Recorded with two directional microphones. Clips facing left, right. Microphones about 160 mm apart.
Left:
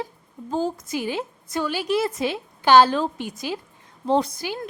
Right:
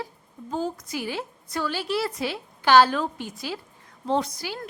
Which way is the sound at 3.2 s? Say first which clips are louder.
Left 4 dB; 15° left (ahead or behind).